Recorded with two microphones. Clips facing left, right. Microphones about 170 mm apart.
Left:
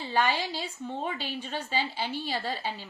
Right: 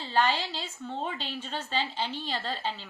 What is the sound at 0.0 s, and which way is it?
A woman's voice, 15° left (ahead or behind).